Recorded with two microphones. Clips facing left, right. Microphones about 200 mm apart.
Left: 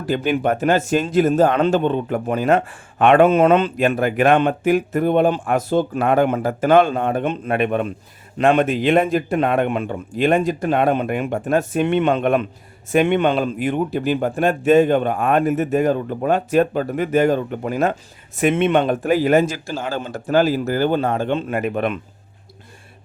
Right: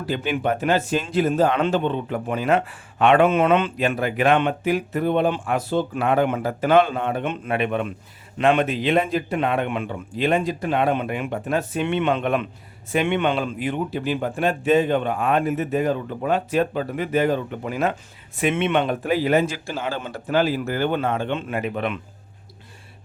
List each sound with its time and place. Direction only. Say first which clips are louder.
0.0 s speech: left 4 dB; 45° left (ahead or behind)